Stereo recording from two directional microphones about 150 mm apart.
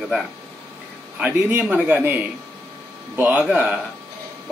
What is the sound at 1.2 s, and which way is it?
A man's voice, 15° right (ahead or behind).